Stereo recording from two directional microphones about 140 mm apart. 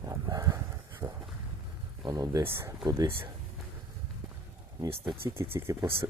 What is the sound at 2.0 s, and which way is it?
Speech, 25° right (ahead or behind).